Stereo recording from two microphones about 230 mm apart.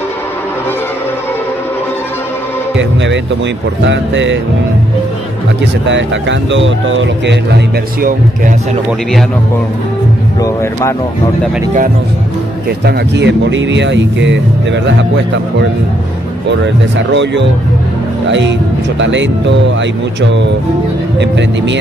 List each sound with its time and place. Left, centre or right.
2.8 s speech: right
5.9 s speech: right
10.4 s speech: centre
12.6 s speech: right
16.4 s speech: right
18.9 s speech: right